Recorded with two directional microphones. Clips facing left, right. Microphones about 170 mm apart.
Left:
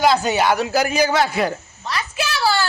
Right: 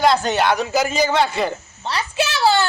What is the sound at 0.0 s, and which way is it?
A man's voice, 5° left (ahead or behind).